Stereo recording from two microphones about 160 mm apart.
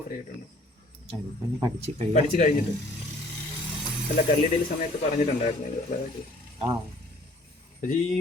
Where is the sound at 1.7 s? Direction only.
40° right (ahead or behind).